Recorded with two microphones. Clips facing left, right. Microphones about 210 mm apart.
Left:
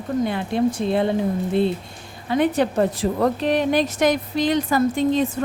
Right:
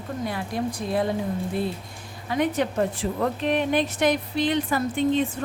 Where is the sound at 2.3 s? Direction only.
30° left (ahead or behind).